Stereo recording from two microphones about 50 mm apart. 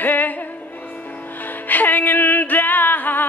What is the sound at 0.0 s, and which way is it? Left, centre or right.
Music, left.